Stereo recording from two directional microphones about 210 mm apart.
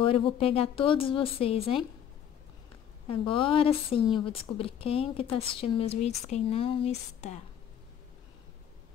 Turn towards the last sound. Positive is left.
turn(degrees=30)  # may be behind; listen again after turning